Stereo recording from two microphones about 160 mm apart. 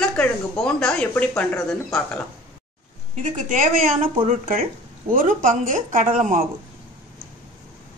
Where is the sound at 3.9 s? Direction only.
35° right (ahead or behind).